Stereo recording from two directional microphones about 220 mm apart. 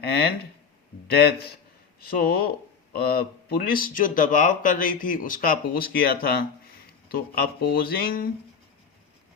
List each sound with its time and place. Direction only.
0.0 s speech: 45° left (ahead or behind)